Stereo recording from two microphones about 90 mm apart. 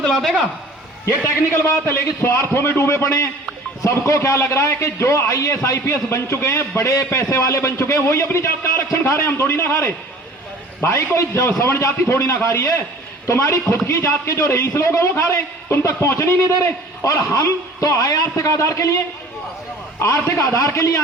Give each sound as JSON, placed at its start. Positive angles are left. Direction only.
{"t": 0.0, "sound": "a man's voice", "side_deg": 5}
{"t": 1.6, "sound": "a man's voice", "side_deg": 25}
{"t": 20.0, "sound": "a man's voice", "side_deg": 30}